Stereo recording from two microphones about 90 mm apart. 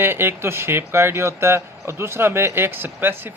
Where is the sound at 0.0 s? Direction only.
25° right (ahead or behind).